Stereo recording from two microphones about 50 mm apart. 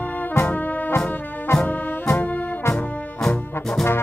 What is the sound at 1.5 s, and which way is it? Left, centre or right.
Music, left.